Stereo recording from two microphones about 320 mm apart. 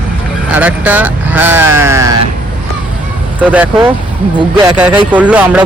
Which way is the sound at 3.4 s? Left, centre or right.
Centre.